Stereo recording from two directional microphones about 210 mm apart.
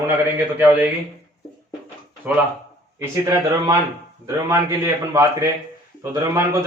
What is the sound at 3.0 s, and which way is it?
A man's voice, 15° right (ahead or behind).